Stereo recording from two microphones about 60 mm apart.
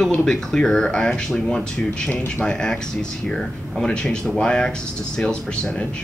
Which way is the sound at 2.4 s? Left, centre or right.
Centre.